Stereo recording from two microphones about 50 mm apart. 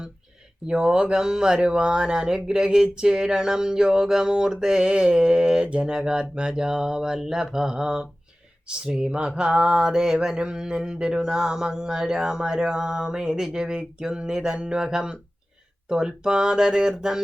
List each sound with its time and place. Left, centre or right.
0.7 s speech: centre